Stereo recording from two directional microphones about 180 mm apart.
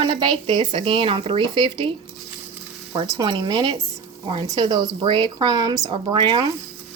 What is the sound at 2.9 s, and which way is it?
Speech, 25° right (ahead or behind).